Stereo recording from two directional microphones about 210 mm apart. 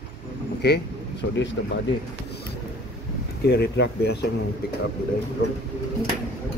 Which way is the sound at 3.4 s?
50° left (ahead or behind).